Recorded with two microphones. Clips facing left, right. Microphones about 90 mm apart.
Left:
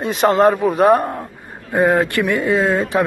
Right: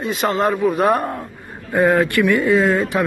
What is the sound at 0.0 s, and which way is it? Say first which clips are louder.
A man's voice: left 5 dB; 35° left (ahead or behind).